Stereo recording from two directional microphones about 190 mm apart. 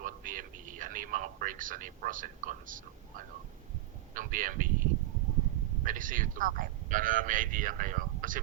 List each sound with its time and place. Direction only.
0.0 s a sound: 45° right (ahead or behind)
4.1 s speech: 45° right (ahead or behind)
5.8 s speech: 45° right (ahead or behind)